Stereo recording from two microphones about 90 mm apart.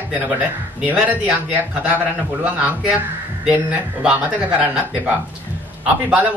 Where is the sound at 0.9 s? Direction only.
15° right (ahead or behind).